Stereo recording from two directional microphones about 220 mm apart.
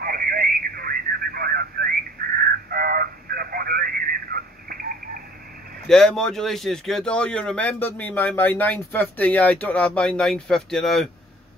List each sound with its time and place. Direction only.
0.0 s radio: 40° right (ahead or behind)
5.9 s speech: centre (ahead or behind)